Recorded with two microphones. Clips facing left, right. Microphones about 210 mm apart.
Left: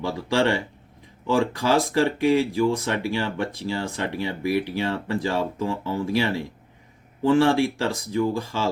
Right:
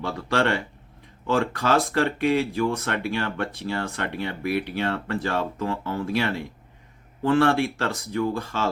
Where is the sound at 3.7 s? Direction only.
60° right (ahead or behind).